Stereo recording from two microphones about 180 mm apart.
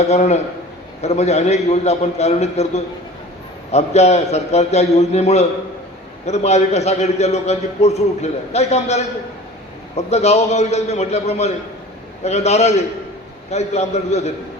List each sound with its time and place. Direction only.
0.0 s a man's voice: 40° left (ahead or behind)